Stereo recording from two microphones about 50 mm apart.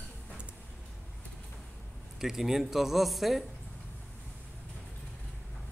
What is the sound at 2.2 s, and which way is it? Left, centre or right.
A man's voice, centre.